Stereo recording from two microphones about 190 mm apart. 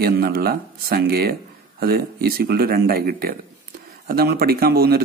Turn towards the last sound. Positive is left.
turn(degrees=-55)  # may be behind; listen again after turning